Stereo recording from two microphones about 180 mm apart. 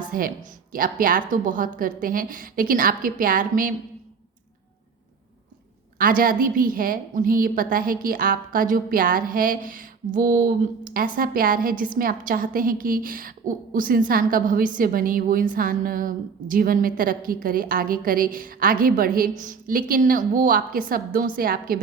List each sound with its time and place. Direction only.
0.1 s a woman's voice: 50° right (ahead or behind)
6.0 s a woman's voice: 50° right (ahead or behind)